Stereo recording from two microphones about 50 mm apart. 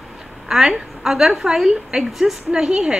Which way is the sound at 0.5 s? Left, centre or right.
Centre.